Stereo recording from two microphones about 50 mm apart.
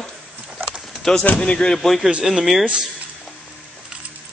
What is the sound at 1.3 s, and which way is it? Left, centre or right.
Speech, centre.